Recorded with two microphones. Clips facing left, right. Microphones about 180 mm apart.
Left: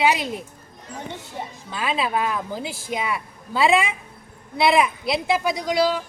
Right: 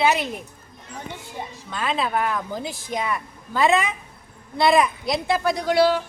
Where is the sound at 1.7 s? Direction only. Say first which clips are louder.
Even; 5° left (ahead or behind).